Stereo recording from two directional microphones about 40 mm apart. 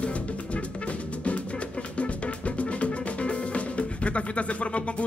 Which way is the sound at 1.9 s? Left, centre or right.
Left.